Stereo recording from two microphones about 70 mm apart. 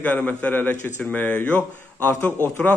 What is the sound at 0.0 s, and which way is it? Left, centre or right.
A man's voice, left.